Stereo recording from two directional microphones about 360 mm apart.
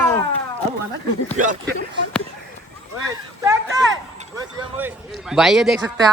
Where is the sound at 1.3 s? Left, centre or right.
Right.